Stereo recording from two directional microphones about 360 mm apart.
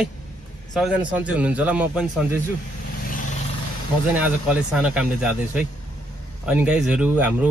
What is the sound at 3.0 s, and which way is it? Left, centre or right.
Vehicle, left.